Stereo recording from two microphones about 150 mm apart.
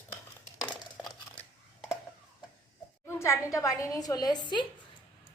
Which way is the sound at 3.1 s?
20° left (ahead or behind).